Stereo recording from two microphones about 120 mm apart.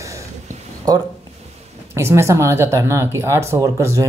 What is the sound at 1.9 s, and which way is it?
Speech, 20° right (ahead or behind).